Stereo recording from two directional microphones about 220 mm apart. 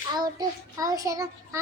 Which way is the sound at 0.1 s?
20° right (ahead or behind).